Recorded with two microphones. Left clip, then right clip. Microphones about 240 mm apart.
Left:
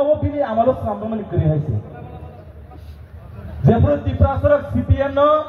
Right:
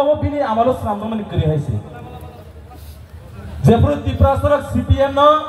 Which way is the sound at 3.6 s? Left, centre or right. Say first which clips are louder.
Right 2 dB; right.